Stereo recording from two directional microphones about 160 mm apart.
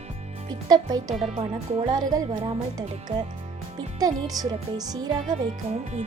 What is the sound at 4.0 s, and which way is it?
Speech, 25° right (ahead or behind).